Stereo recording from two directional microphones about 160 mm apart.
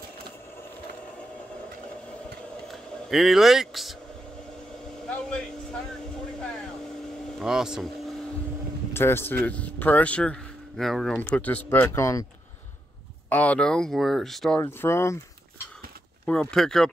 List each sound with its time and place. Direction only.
2.7 s speech: centre (ahead or behind)
5.0 s a sound: 5° left (ahead or behind)
7.3 s speech: 5° right (ahead or behind)
8.9 s speech: 15° left (ahead or behind)
13.3 s speech: 10° left (ahead or behind)
14.6 s speech: 15° left (ahead or behind)
16.3 s speech: 5° left (ahead or behind)